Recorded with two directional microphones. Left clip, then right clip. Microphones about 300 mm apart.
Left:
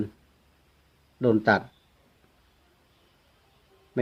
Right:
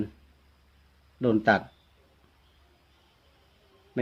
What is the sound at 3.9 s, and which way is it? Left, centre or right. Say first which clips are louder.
Speech: left 3 dB; centre.